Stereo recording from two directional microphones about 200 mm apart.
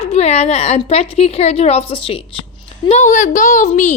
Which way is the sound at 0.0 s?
30° left (ahead or behind).